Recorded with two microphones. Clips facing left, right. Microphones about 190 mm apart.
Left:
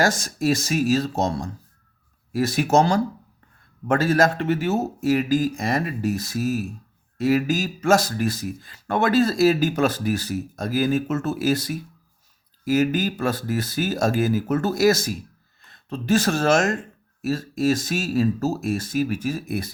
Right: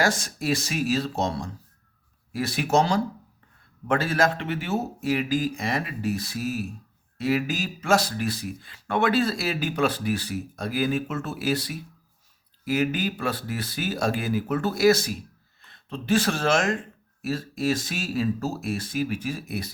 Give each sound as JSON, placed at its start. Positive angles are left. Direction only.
{"t": 0.0, "sound": "speech", "side_deg": 45}